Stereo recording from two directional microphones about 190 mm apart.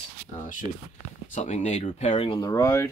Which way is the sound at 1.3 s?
35° left (ahead or behind).